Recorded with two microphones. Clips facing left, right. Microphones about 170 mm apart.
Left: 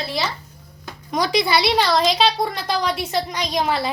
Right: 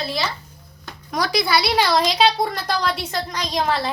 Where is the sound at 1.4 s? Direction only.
20° left (ahead or behind).